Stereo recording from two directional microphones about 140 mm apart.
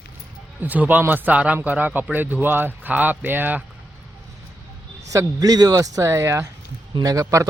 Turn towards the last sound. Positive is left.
turn(degrees=-20)  # may be behind; listen again after turning